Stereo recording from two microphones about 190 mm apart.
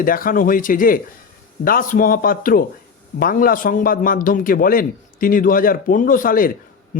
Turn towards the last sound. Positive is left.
turn(degrees=45)  # may be behind; listen again after turning